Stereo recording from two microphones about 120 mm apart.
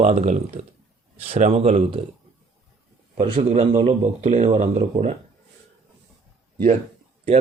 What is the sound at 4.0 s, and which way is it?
Speech, 75° right (ahead or behind).